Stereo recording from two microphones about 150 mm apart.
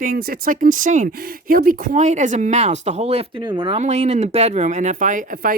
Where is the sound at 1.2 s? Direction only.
75° right (ahead or behind); by 3.4 s 45° right (ahead or behind).